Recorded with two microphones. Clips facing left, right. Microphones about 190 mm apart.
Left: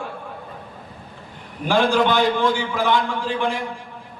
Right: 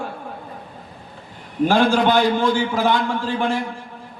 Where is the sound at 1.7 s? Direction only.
45° right (ahead or behind).